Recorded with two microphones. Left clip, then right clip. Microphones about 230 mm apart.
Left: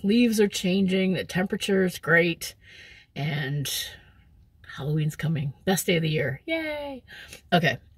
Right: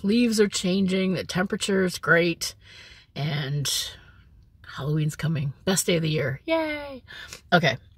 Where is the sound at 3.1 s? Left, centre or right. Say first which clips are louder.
Even; right.